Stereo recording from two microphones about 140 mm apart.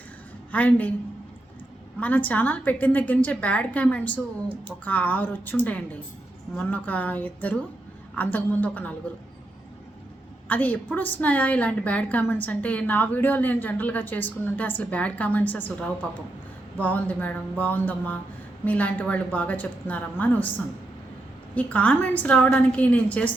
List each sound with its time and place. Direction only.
0.5 s a woman's voice: 10° left (ahead or behind)
2.0 s a woman's voice: 10° left (ahead or behind)
10.5 s a woman's voice: 10° left (ahead or behind)
21.5 s a woman's voice: 10° left (ahead or behind)